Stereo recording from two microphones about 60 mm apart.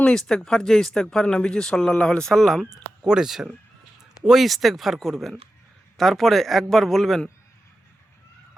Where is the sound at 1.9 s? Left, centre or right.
Left.